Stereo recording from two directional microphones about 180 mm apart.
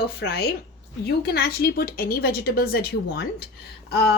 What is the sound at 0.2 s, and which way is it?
A woman's voice, 65° left (ahead or behind).